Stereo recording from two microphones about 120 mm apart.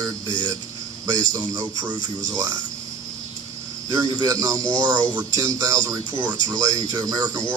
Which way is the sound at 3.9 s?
30° right (ahead or behind).